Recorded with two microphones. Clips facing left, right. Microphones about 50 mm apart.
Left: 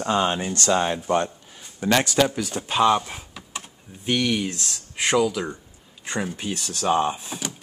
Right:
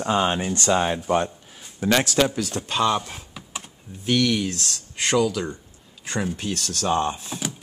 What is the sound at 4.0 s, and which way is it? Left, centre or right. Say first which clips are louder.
Speech: right 2 dB; centre.